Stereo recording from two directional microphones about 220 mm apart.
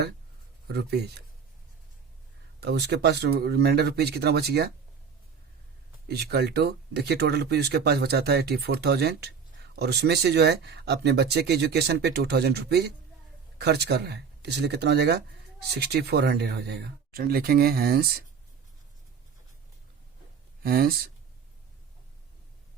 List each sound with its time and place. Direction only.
0.7 s speech: 50° right (ahead or behind)
2.6 s speech: 50° right (ahead or behind)
6.1 s speech: 45° right (ahead or behind)
20.7 s speech: 40° right (ahead or behind)